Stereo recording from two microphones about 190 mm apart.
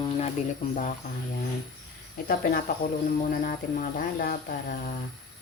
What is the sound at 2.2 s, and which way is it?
Speech, 50° left (ahead or behind).